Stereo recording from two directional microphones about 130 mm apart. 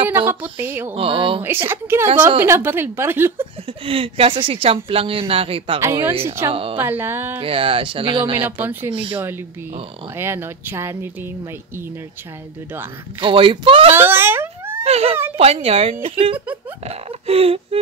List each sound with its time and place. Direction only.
0.3 s a woman's voice: 15° right (ahead or behind)
0.9 s speech: 45° right (ahead or behind)
1.4 s a woman's voice: 15° right (ahead or behind)
3.6 s speech: 45° right (ahead or behind)
5.8 s speech: 20° right (ahead or behind)
6.5 s speech: 45° right (ahead or behind)
6.8 s a woman's voice: 15° right (ahead or behind)
7.3 s speech: 45° right (ahead or behind)
8.5 s a woman's voice: 15° right (ahead or behind)
8.9 s speech: 40° right (ahead or behind)
10.1 s a woman's voice: 20° right (ahead or behind)
13.2 s speech: 40° right (ahead or behind)
13.9 s a sound: 15° right (ahead or behind)
14.8 s speech: 50° right (ahead or behind)